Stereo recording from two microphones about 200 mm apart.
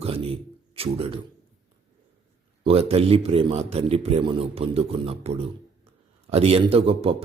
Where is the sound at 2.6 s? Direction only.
30° right (ahead or behind).